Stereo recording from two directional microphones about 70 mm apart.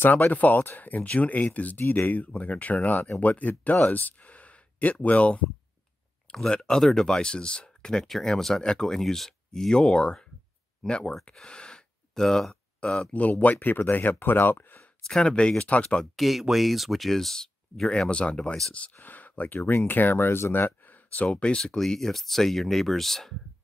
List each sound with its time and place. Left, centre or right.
0.0 s speech: left
3.8 s a sound: left
5.0 s speech: centre
13.1 s speech: left
15.0 s speech: centre
16.2 s speech: centre
18.9 s speech: left; by 23.3 s centre